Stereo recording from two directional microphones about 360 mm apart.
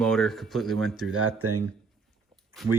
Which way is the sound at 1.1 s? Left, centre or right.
Right.